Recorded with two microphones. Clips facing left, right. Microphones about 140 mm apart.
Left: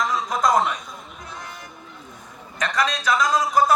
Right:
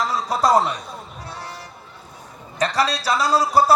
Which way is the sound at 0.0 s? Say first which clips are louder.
Right 2 dB; 35° right (ahead or behind).